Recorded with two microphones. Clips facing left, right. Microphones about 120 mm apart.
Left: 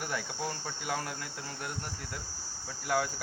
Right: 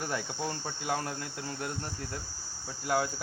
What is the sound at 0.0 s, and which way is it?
Cricket, 25° right (ahead or behind).